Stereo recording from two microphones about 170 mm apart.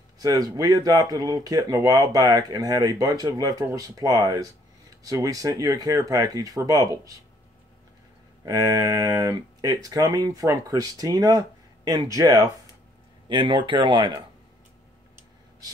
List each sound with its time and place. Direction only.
0.2 s speech: 20° right (ahead or behind)
8.5 s speech: 20° right (ahead or behind)